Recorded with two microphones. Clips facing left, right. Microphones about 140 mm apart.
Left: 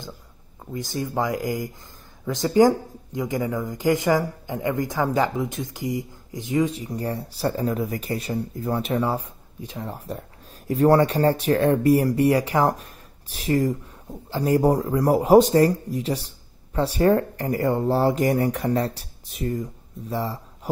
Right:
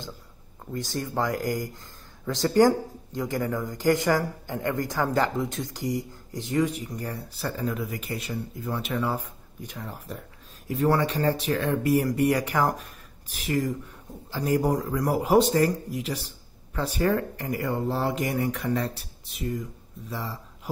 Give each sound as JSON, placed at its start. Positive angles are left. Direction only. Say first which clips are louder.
{"t": 0.9, "sound": "speech", "louder": "left 3 dB", "side_deg": 15}
{"t": 6.6, "sound": "speech", "louder": "left 2 dB", "side_deg": 25}
{"t": 9.9, "sound": "speech", "louder": "left 5 dB", "side_deg": 40}